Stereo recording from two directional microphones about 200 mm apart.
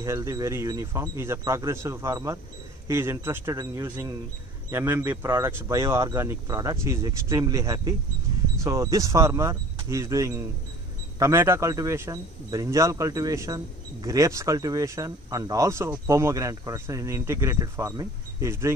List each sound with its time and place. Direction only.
0.0 s speech: 15° right (ahead or behind)